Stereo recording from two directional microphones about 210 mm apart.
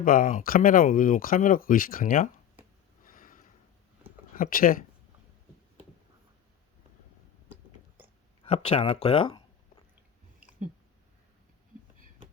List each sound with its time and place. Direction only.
0.0 s speech: 40° left (ahead or behind)
3.0 s a sound: 40° left (ahead or behind)
4.4 s speech: 40° left (ahead or behind)
8.4 s speech: 30° left (ahead or behind)